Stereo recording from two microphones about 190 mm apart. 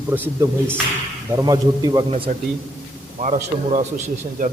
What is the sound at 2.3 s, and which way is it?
Speech, 45° right (ahead or behind).